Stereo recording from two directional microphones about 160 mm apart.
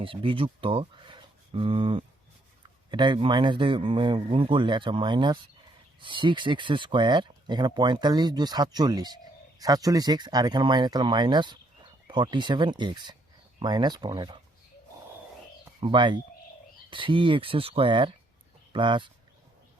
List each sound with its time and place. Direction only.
0.0 s speech: 35° right (ahead or behind)
15.8 s speech: 30° right (ahead or behind)